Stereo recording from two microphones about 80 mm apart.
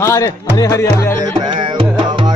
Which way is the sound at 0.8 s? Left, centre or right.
Left.